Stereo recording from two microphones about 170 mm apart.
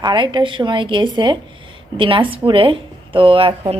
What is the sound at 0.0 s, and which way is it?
A woman's voice, 25° right (ahead or behind).